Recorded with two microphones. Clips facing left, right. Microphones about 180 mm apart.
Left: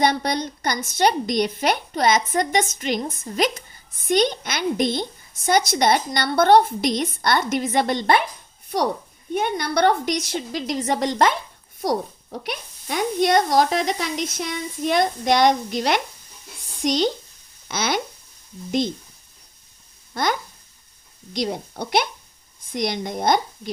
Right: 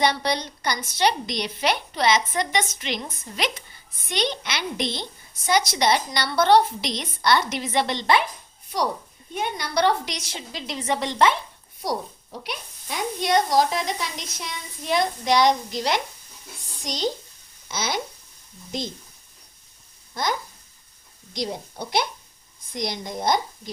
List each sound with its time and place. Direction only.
0.0 s a woman's voice: 50° left (ahead or behind)
12.4 s a woman's voice: 55° left (ahead or behind)
14.3 s a woman's voice: 55° left (ahead or behind)
21.3 s a woman's voice: 65° left (ahead or behind)